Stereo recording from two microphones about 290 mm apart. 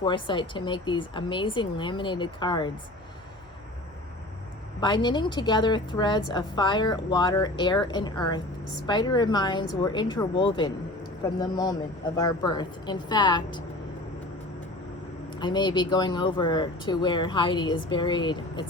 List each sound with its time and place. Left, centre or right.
0.0 s a woman's voice: centre
4.8 s a woman's voice: centre
15.3 s a woman's voice: centre